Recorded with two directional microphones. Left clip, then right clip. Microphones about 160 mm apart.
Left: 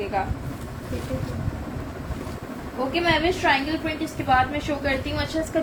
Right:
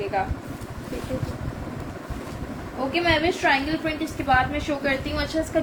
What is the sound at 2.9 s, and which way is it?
A woman's voice, 30° right (ahead or behind).